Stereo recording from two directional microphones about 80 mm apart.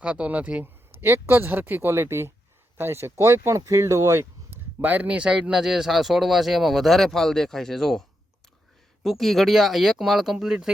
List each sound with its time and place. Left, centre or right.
0.0 s speech: centre
1.0 s speech: right
4.8 s speech: right; by 8.0 s centre
9.0 s speech: centre